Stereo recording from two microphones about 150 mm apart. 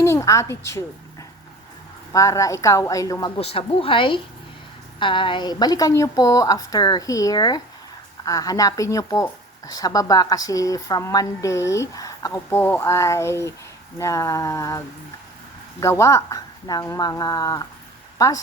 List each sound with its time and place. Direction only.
0.0 s a woman's voice: 20° left (ahead or behind)
2.1 s a woman's voice: 20° left (ahead or behind)
3.3 s a woman's voice: 40° left (ahead or behind); by 14.8 s 20° left (ahead or behind)
15.8 s a woman's voice: 20° left (ahead or behind)